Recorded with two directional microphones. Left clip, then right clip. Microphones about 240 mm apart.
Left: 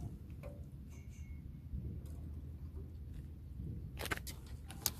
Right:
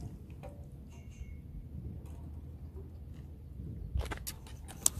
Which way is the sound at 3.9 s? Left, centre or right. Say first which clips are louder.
Left 2 dB; left.